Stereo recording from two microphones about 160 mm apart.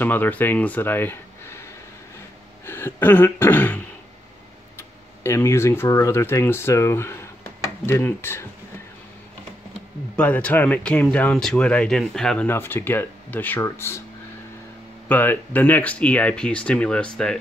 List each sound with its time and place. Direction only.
0.0 s speech: 10° left (ahead or behind)
2.6 s throat clearing: 15° left (ahead or behind)
4.7 s speech: 15° left (ahead or behind)
10.1 s speech: 10° left (ahead or behind)
12.4 s speech: 15° left (ahead or behind)
15.0 s speech: 10° left (ahead or behind)